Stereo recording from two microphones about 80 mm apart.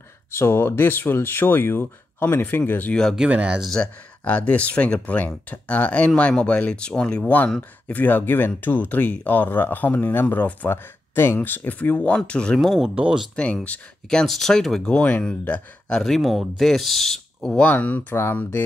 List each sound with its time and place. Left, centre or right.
0.3 s speech: left
2.9 s speech: centre
3.2 s speech: centre
3.7 s speech: centre
12.5 s speech: centre
13.7 s speech: centre
15.0 s speech: centre
16.0 s speech: centre
17.6 s speech: centre